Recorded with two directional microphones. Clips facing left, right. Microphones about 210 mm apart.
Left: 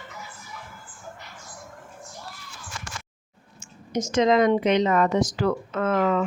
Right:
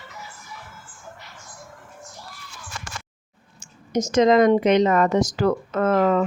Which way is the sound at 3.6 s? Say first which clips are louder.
Right 4 dB; 40° right (ahead or behind).